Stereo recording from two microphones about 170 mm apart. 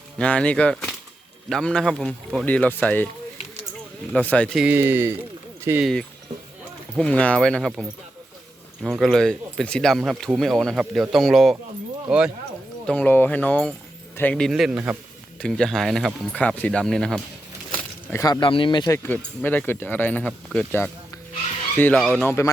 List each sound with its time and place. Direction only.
0.2 s speech: 5° left (ahead or behind)
4.1 s speech: 10° left (ahead or behind)
4.6 s speech: 10° right (ahead or behind)
5.8 s speech: 5° left (ahead or behind)
12.8 s speech: 5° left (ahead or behind)
15.4 s speech: 5° left (ahead or behind)
18.1 s speech: 20° left (ahead or behind)
19.0 s speech: 10° left (ahead or behind)